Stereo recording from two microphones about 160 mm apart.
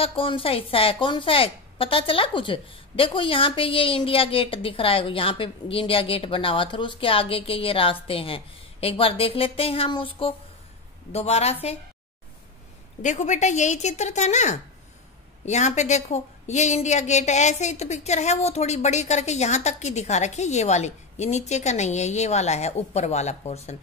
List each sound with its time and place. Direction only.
0.0 s a woman's voice: 35° left (ahead or behind)
13.0 s a woman's voice: 50° left (ahead or behind)